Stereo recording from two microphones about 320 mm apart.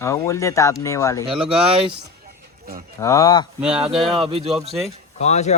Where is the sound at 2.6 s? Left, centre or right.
Right.